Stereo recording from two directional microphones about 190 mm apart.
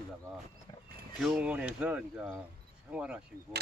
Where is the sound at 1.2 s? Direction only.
5° right (ahead or behind).